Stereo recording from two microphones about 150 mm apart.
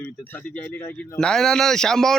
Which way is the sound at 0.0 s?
10° left (ahead or behind).